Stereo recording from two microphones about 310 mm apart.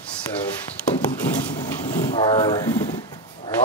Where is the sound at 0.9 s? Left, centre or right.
Left.